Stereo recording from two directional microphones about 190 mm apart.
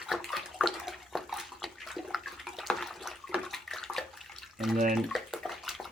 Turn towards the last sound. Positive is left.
turn(degrees=0)  # may be behind; listen again after turning